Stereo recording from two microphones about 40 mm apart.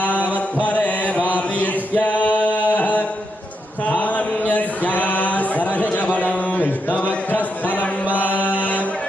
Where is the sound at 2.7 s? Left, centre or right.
Left.